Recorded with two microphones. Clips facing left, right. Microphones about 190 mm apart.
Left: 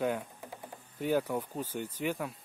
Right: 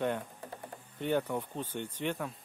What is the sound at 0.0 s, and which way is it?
Speech, 5° left (ahead or behind).